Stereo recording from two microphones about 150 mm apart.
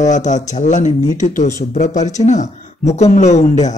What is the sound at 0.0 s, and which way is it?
Speech, 55° left (ahead or behind).